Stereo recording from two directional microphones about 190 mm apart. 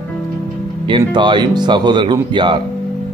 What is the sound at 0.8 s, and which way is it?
Speech, 25° right (ahead or behind).